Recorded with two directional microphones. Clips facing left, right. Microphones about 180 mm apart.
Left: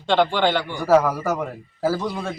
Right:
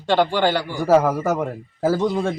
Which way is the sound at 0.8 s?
20° right (ahead or behind).